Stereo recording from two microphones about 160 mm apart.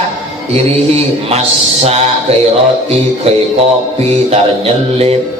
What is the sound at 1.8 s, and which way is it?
Speech, 40° right (ahead or behind).